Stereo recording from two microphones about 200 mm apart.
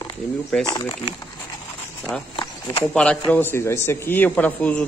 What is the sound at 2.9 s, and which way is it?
Speech, 5° left (ahead or behind).